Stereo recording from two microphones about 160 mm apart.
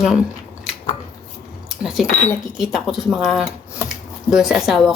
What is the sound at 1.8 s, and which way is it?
Speech, centre (ahead or behind).